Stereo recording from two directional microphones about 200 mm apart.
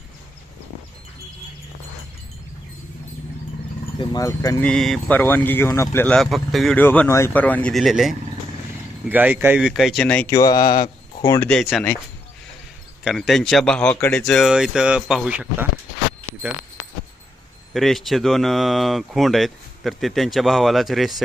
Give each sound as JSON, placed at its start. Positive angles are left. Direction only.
{"t": 4.0, "sound": "speech", "side_deg": 20}
{"t": 4.6, "sound": "speech", "side_deg": 0}
{"t": 11.4, "sound": "speech", "side_deg": 0}
{"t": 13.1, "sound": "speech", "side_deg": 0}
{"t": 17.7, "sound": "speech", "side_deg": 0}